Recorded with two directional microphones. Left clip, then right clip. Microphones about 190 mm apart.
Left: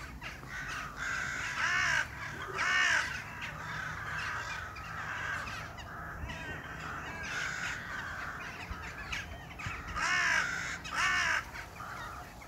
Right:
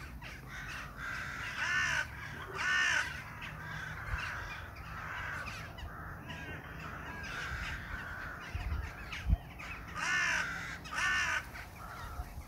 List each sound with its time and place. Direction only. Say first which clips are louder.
1.6 s crow: left 2 dB; 10° right (ahead or behind)
9.9 s crow: left 3 dB; 10° right (ahead or behind)
10.5 s crow: left 4 dB; 50° left (ahead or behind)
11.0 s crow: left 2 dB; 10° right (ahead or behind)